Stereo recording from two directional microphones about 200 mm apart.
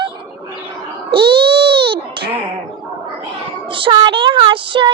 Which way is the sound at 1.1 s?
55° right (ahead or behind).